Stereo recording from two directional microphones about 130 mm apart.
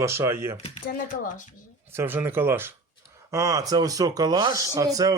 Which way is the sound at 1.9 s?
15° right (ahead or behind).